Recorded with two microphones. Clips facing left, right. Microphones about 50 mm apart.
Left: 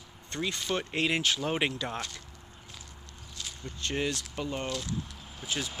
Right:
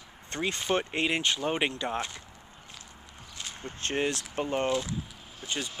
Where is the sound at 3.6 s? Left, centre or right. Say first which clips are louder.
Right 2 dB; right.